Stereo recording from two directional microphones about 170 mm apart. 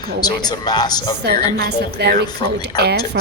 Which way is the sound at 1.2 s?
65° right (ahead or behind).